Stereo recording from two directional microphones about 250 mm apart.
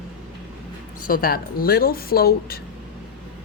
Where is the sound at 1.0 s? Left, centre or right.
Left.